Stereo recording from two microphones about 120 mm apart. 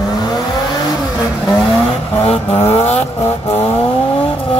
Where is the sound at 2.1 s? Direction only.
55° left (ahead or behind).